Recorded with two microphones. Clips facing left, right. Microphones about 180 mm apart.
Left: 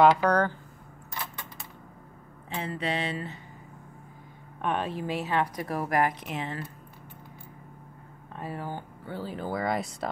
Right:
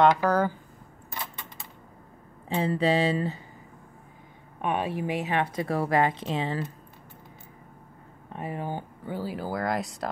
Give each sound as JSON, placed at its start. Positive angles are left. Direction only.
{"t": 0.0, "sound": "speech", "side_deg": -5}
{"t": 2.5, "sound": "a sound", "side_deg": -30}
{"t": 4.6, "sound": "speech", "side_deg": -10}
{"t": 5.6, "sound": "speech", "side_deg": -25}
{"t": 8.3, "sound": "speech", "side_deg": -20}